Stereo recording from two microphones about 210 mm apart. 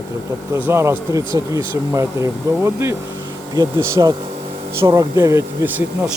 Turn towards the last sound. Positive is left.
turn(degrees=-10)  # may be behind; listen again after turning